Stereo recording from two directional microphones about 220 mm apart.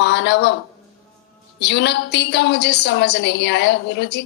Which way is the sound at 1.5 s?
50° left (ahead or behind).